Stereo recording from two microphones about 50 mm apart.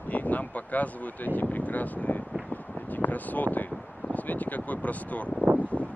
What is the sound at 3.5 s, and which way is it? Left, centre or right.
Speech, left.